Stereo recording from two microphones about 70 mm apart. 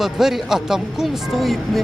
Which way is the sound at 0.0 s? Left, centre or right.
Centre.